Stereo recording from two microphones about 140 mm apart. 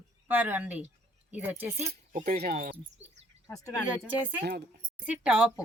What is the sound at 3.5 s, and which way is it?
Speech, 20° left (ahead or behind).